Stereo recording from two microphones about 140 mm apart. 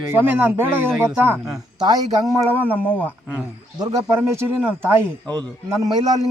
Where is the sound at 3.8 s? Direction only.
30° right (ahead or behind).